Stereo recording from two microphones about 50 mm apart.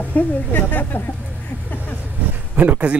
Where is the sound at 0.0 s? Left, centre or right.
Left.